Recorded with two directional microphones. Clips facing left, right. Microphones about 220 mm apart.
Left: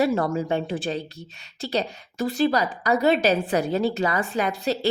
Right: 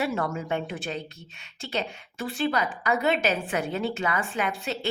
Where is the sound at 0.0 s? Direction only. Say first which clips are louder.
Left 6 dB; 35° left (ahead or behind).